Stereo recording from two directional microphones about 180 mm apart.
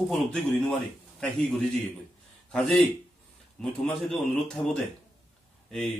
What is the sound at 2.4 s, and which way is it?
Speech, 5° left (ahead or behind).